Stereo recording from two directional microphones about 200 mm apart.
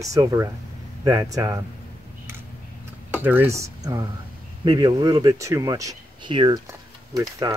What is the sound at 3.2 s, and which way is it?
Speech, 10° right (ahead or behind).